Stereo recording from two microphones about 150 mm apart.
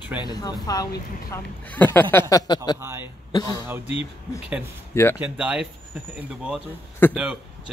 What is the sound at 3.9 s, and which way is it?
Speech, 40° left (ahead or behind).